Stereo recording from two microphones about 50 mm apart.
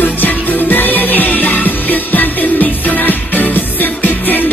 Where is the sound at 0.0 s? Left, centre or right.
Left.